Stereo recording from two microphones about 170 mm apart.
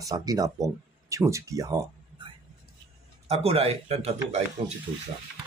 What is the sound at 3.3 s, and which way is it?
A man's voice, 35° right (ahead or behind).